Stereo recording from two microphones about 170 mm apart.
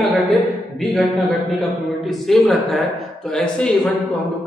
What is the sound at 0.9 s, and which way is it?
Speech, centre (ahead or behind).